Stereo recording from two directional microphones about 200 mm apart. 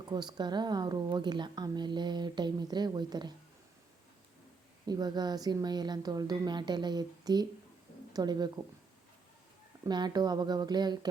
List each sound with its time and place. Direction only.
0.1 s a woman's voice: 20° right (ahead or behind)
4.9 s a woman's voice: 20° right (ahead or behind)
9.8 s a woman's voice: 20° right (ahead or behind)